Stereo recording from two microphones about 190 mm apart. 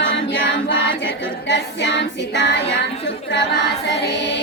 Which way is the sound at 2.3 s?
65° left (ahead or behind).